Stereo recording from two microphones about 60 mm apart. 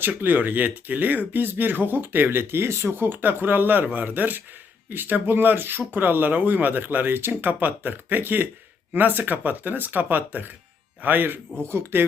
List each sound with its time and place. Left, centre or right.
0.2 s speech: right
11.6 s speech: right